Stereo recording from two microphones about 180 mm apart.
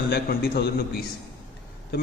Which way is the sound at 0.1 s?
60° left (ahead or behind).